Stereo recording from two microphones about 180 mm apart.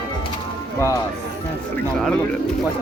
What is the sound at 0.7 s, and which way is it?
Speech, 20° left (ahead or behind).